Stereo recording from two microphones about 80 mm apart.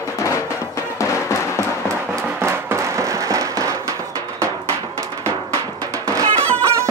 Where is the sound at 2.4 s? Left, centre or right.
Right.